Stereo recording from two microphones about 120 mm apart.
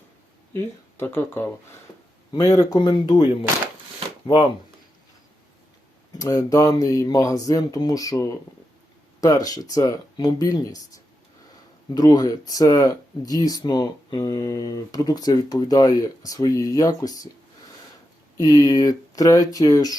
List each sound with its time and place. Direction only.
0.5 s speech: 20° left (ahead or behind)
2.3 s speech: 30° left (ahead or behind)
6.1 s speech: 25° left (ahead or behind)
18.3 s speech: 35° left (ahead or behind)